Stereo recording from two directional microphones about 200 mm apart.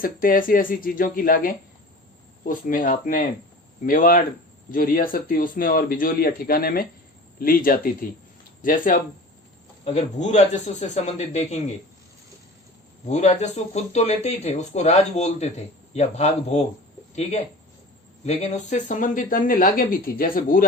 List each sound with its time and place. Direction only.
0.0 s speech: 45° left (ahead or behind)
13.1 s speech: 35° left (ahead or behind)
18.3 s speech: 35° left (ahead or behind)